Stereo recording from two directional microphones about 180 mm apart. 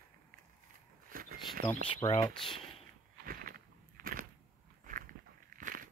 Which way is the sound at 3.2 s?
55° right (ahead or behind).